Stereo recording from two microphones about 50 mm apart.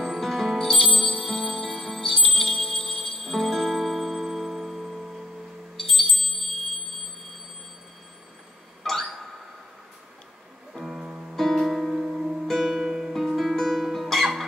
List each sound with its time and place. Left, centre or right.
0.0 s music: centre
5.8 s wind chime: centre
8.8 s a sound: centre
10.7 s music: centre
11.3 s music: centre
12.4 s music: centre
13.1 s music: centre